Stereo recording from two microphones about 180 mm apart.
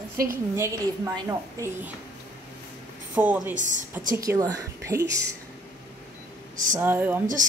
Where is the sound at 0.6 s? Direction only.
15° right (ahead or behind).